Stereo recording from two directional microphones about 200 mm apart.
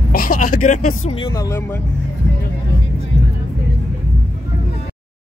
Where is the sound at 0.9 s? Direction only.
90° left.